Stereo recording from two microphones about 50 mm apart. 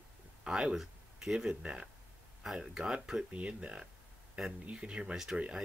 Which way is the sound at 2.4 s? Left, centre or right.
Centre.